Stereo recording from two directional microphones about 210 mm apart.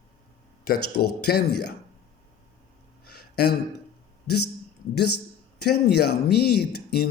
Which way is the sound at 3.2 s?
50° left (ahead or behind).